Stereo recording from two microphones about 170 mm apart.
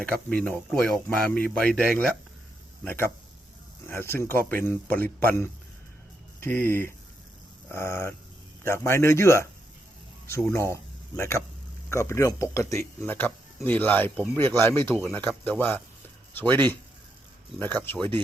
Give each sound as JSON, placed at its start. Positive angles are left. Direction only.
{"t": 0.3, "sound": "speech", "side_deg": 5}
{"t": 3.8, "sound": "speech", "side_deg": 15}
{"t": 11.9, "sound": "speech", "side_deg": 15}
{"t": 17.6, "sound": "speech", "side_deg": 10}